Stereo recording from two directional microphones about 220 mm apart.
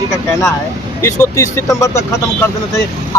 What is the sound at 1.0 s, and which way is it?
Speech, 15° left (ahead or behind).